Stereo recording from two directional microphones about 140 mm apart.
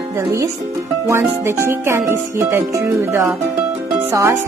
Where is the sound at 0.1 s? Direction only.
20° right (ahead or behind).